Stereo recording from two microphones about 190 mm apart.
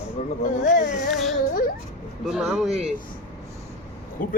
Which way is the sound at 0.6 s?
40° left (ahead or behind).